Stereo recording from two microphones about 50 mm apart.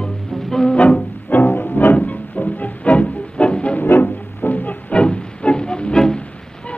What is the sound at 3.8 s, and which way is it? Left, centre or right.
Music, left.